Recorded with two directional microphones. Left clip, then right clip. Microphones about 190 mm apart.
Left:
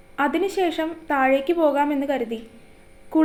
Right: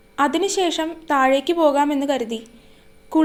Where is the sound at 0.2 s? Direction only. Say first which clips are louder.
Right 2 dB; 30° right (ahead or behind).